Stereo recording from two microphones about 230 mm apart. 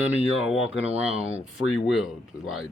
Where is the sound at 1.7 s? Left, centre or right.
Centre.